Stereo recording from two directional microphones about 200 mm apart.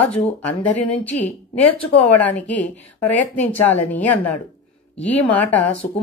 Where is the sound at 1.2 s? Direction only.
25° left (ahead or behind).